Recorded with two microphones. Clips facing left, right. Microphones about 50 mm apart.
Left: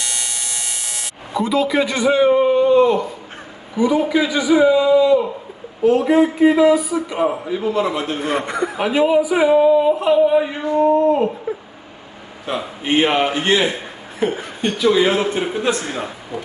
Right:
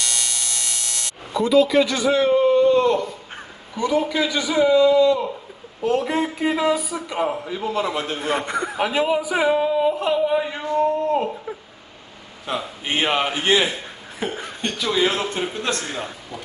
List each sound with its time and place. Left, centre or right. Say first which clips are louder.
0.0 s electric shaver: even; centre
3.8 s a man's voice: left 4 dB; centre
13.3 s a man's voice: left 2 dB; centre